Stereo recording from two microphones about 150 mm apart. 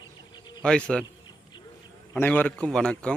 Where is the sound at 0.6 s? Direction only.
5° left (ahead or behind).